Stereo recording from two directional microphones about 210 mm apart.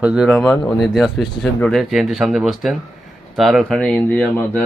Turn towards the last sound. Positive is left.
turn(degrees=5)  # may be behind; listen again after turning